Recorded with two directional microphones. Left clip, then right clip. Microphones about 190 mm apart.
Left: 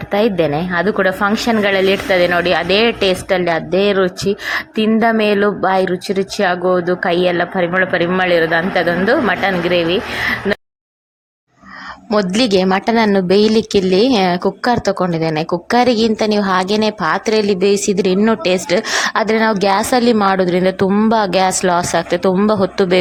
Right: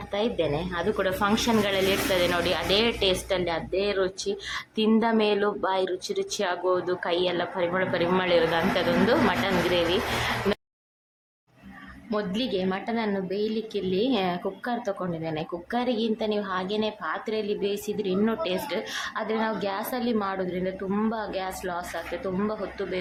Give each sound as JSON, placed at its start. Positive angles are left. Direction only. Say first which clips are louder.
{"t": 0.1, "sound": "a woman's voice", "louder": "left 12 dB", "side_deg": 30}
{"t": 12.1, "sound": "a woman's voice", "louder": "left 14 dB", "side_deg": 35}